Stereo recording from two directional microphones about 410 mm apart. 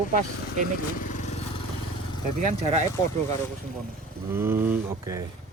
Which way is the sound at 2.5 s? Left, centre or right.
Centre.